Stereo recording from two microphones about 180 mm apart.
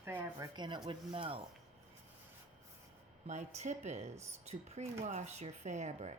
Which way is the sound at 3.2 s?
40° right (ahead or behind).